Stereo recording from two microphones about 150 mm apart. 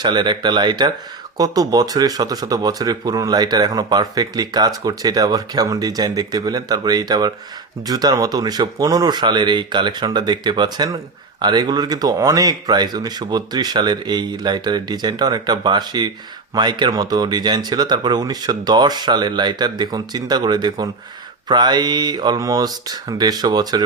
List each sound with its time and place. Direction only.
0.0 s speech: 30° right (ahead or behind)